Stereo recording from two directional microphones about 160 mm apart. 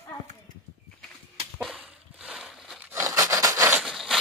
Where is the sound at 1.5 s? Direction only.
5° right (ahead or behind).